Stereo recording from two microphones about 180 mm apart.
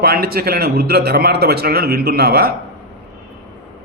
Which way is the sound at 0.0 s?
60° right (ahead or behind).